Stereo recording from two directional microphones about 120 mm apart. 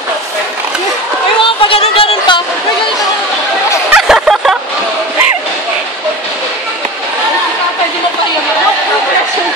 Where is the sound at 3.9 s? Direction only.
5° right (ahead or behind).